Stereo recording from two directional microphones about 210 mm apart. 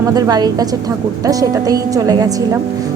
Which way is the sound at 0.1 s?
20° right (ahead or behind).